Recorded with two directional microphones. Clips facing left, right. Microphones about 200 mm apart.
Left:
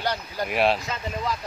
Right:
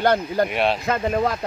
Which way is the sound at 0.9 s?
55° right (ahead or behind).